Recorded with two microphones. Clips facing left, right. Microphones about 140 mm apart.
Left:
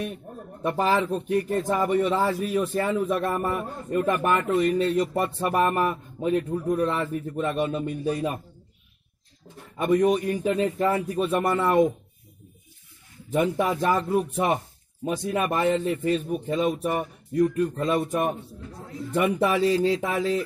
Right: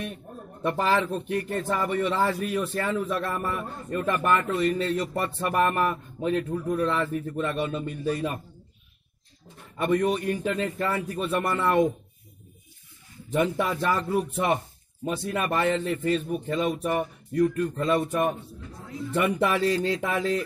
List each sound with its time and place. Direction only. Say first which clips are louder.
0.6 s a man's voice: left 1 dB; 10° left (ahead or behind)
2.9 s a man's voice: left 3 dB; 25° left (ahead or behind)
3.9 s a man's voice: left 2 dB; 15° left (ahead or behind)
9.8 s a man's voice: left 3 dB; 10° left (ahead or behind)
13.3 s a man's voice: left 2 dB; 10° left (ahead or behind)
15.0 s a man's voice: left 2 dB; 10° left (ahead or behind)
19.1 s a man's voice: left 2 dB; 10° left (ahead or behind)